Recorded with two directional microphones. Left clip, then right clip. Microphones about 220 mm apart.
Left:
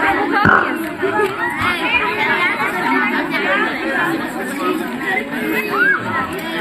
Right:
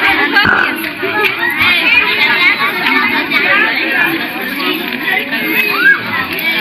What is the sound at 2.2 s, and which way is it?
Chatter, 35° right (ahead or behind).